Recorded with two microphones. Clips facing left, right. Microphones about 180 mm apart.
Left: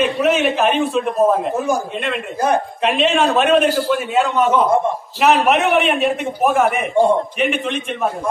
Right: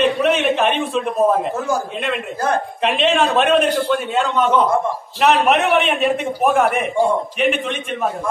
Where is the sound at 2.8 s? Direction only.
Centre (ahead or behind).